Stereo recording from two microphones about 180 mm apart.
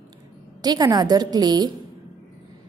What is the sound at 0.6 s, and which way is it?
A woman's voice, 20° right (ahead or behind).